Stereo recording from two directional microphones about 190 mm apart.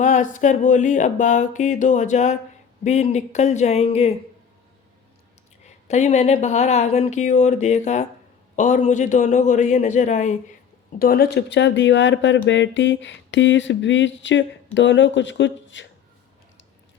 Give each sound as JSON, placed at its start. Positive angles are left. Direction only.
{"t": 0.0, "sound": "speech", "side_deg": 40}
{"t": 5.6, "sound": "speech", "side_deg": 35}
{"t": 11.0, "sound": "a sound", "side_deg": 50}